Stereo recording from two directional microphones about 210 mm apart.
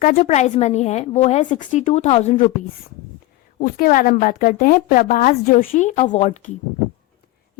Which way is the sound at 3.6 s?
45° left (ahead or behind).